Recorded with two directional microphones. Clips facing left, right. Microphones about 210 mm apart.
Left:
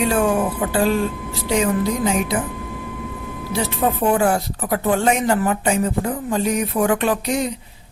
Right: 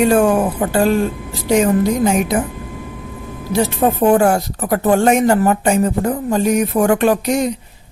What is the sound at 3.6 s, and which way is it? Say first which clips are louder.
Speech: right 5 dB; 45° right (ahead or behind).